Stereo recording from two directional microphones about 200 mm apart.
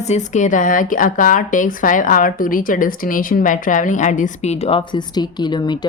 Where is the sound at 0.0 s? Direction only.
35° left (ahead or behind).